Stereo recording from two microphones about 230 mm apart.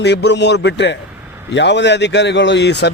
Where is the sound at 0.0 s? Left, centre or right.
Left.